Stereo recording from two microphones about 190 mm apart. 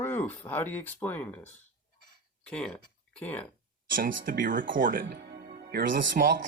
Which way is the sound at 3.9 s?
45° right (ahead or behind).